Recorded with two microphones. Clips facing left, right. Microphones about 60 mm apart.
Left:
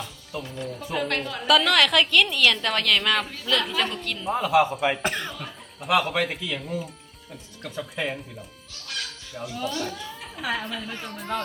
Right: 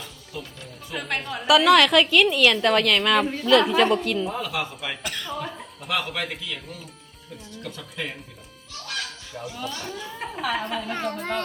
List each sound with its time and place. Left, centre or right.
0.3 s a woman's voice: centre
4.4 s a man's voice: centre
5.8 s speech: centre
9.3 s a woman's voice: centre
9.7 s speech: centre
10.4 s a woman's voice: centre
10.9 s speech: right